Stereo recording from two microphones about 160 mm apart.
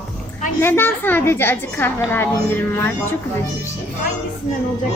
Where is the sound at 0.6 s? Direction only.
15° left (ahead or behind).